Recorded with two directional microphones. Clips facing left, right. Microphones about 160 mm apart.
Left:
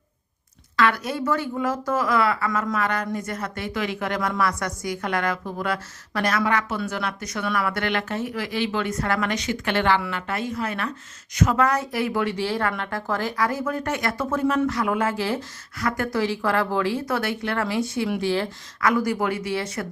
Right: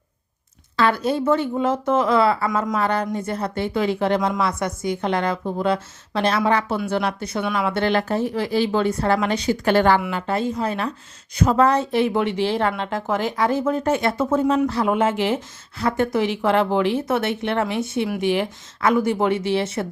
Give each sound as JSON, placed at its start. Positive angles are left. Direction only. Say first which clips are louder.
{"t": 0.8, "sound": "speech", "louder": "right 3 dB", "side_deg": -30}